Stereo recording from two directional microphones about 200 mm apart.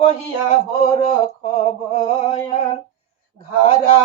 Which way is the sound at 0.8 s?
30° left (ahead or behind).